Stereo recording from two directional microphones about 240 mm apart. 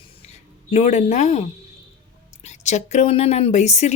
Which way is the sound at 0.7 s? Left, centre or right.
Left.